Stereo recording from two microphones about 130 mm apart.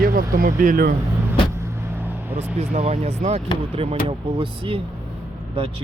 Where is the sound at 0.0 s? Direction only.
90° right.